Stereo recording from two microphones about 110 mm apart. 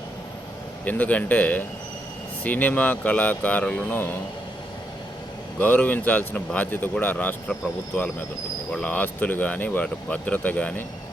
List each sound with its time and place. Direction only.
0.9 s speech: 15° left (ahead or behind)
5.5 s speech: 15° left (ahead or behind)
8.7 s speech: 10° left (ahead or behind)